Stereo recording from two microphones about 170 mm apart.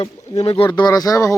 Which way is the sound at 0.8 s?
20° left (ahead or behind).